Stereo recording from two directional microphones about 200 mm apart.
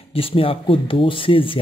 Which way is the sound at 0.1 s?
30° left (ahead or behind).